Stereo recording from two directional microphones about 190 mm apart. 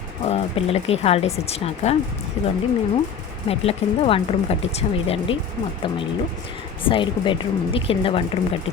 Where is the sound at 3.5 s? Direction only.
30° left (ahead or behind).